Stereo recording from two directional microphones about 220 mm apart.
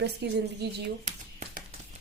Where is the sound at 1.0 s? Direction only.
35° right (ahead or behind).